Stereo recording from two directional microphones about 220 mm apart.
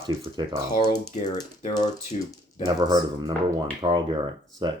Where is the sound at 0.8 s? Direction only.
25° left (ahead or behind).